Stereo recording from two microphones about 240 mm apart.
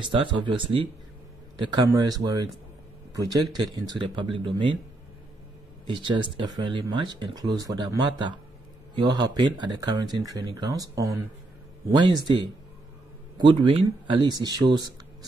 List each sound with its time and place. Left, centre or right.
0.1 s speech: centre
5.9 s speech: centre
13.4 s speech: right